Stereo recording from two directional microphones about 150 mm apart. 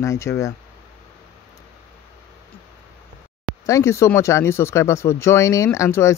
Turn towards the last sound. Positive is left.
turn(degrees=20)  # may be behind; listen again after turning